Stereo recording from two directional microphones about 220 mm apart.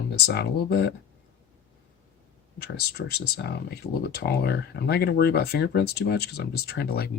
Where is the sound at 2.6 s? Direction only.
45° left (ahead or behind).